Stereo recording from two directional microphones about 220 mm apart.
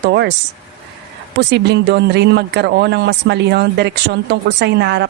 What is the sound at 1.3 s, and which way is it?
A woman's voice, 50° right (ahead or behind).